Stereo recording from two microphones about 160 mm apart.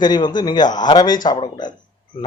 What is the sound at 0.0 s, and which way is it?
Speech, 25° left (ahead or behind).